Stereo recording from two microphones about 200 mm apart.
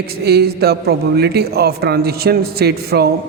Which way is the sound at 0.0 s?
50° right (ahead or behind).